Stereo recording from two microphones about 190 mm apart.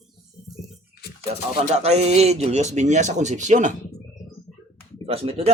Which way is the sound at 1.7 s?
35° right (ahead or behind).